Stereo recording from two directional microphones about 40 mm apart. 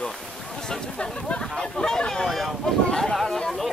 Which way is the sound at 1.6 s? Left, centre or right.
Centre.